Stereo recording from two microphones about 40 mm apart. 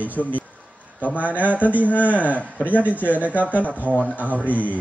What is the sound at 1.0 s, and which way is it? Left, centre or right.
A man's voice, left.